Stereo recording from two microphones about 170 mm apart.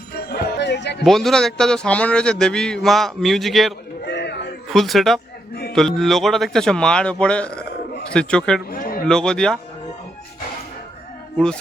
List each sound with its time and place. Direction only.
0.3 s music: 65° left (ahead or behind); by 1.0 s 85° left
1.0 s a man's voice: centre (ahead or behind)
4.0 s a sound: 75° left (ahead or behind)
4.7 s a man's voice: centre (ahead or behind)
8.7 s a sound: 60° left (ahead or behind)
9.0 s a man's voice: 5° left (ahead or behind)